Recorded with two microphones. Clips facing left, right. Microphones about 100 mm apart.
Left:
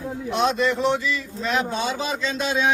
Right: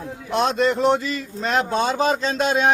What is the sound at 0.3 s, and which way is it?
Speech, 45° right (ahead or behind).